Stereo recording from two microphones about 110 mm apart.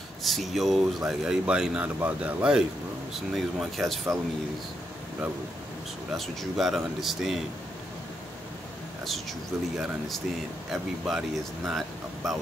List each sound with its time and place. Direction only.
0.2 s speech: centre (ahead or behind)
6.1 s speech: centre (ahead or behind)
9.8 s speech: centre (ahead or behind)